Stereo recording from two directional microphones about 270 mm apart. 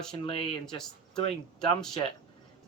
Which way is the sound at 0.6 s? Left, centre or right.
Centre.